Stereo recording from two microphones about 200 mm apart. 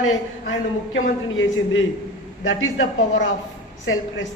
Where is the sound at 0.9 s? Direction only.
70° left (ahead or behind).